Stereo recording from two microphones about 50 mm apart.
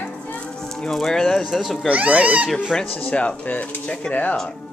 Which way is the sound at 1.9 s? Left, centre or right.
Right.